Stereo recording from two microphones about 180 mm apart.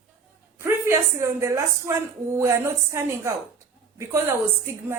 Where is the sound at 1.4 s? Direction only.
15° right (ahead or behind).